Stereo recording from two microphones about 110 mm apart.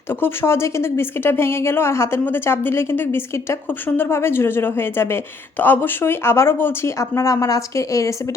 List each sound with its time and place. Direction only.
0.1 s a woman's voice: 20° left (ahead or behind)